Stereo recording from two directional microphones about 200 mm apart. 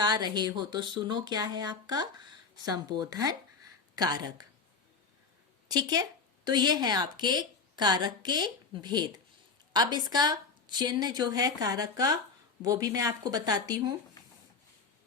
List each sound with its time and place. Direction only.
0.0 s a woman's voice: 20° right (ahead or behind)
5.6 s a woman's voice: 20° right (ahead or behind)